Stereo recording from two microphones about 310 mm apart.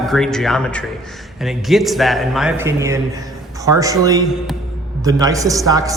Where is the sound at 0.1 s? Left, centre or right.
Centre.